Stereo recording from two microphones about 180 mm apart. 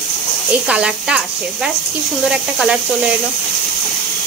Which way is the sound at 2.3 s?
5° right (ahead or behind).